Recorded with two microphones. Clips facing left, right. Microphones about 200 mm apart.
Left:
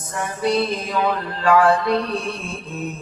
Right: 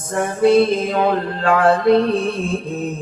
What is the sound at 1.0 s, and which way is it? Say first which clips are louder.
Mantra: right 2 dB; 50° right (ahead or behind).